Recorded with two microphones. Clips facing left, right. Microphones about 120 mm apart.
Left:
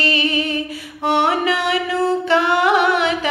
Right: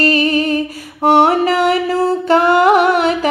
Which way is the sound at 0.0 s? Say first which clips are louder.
Right 6 dB; 45° right (ahead or behind).